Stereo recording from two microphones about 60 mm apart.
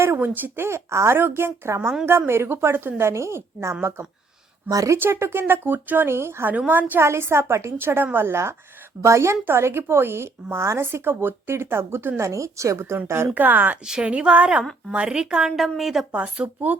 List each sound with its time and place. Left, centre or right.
0.2 s speech: right
1.2 s speech: right
1.6 s speech: right
4.7 s speech: right
4.9 s speech: right
6.5 s speech: right
7.0 s speech: right
13.3 s speech: right
13.8 s speech: centre
14.6 s a woman's voice: centre
14.9 s a woman's voice: centre
16.1 s speech: right